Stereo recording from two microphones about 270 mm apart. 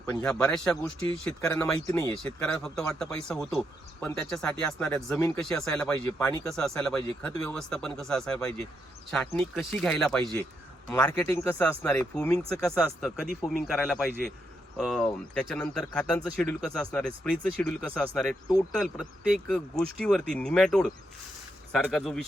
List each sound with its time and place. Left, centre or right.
0.1 s speech: centre
13.7 s speech: centre